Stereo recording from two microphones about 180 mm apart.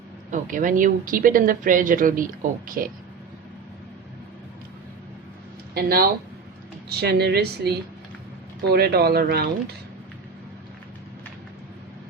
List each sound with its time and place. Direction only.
0.3 s speech: 45° right (ahead or behind)
5.7 s speech: 60° right (ahead or behind)